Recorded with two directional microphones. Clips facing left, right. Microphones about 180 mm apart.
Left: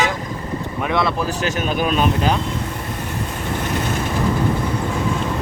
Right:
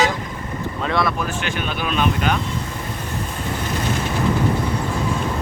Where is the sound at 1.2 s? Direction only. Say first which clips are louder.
Left 3 dB; 40° left (ahead or behind).